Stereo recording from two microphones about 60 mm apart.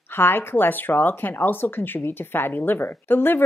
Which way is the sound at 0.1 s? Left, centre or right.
Left.